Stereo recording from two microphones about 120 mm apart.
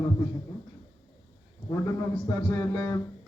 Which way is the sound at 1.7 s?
25° left (ahead or behind).